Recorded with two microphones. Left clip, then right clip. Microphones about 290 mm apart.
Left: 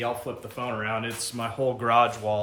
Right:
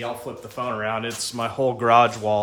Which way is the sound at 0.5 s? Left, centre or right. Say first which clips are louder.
Right 4 dB; centre.